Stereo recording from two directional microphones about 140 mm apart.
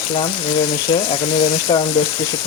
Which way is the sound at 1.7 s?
35° left (ahead or behind).